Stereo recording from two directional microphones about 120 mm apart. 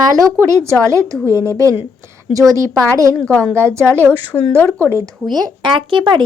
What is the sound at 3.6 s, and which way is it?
Speech, 20° right (ahead or behind).